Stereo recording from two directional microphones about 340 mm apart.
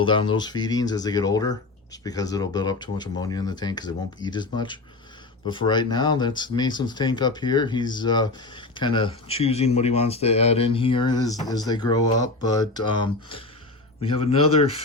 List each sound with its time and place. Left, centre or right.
0.0 s speech: centre